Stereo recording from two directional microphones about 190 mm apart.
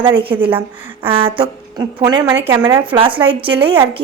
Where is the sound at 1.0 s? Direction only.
30° right (ahead or behind).